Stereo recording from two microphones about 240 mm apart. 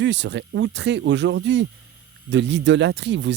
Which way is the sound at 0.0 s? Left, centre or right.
Right.